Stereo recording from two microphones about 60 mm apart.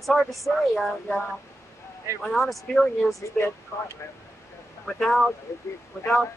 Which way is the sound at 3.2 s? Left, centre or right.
Left.